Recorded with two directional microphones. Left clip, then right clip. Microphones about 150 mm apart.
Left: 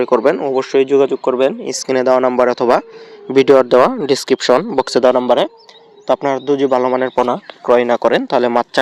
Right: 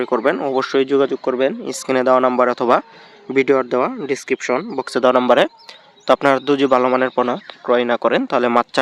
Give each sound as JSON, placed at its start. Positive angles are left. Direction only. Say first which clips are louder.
{"t": 0.0, "sound": "speech", "louder": "left 5 dB", "side_deg": 10}
{"t": 0.3, "sound": "speech", "louder": "left 3 dB", "side_deg": 0}
{"t": 3.2, "sound": "speech", "louder": "left 6 dB", "side_deg": 25}
{"t": 4.5, "sound": "speech", "louder": "left 7 dB", "side_deg": 20}
{"t": 5.1, "sound": "a man's voice", "louder": "even", "side_deg": -10}
{"t": 6.7, "sound": "speech", "louder": "left 1 dB", "side_deg": -5}
{"t": 7.7, "sound": "speech", "louder": "left 4 dB", "side_deg": 15}